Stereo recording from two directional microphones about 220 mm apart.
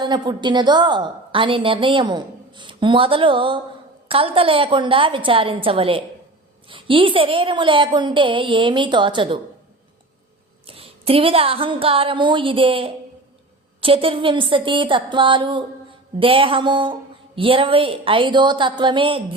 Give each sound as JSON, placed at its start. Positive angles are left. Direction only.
{"t": 0.0, "sound": "a woman's voice", "side_deg": -20}
{"t": 10.7, "sound": "a woman's voice", "side_deg": -25}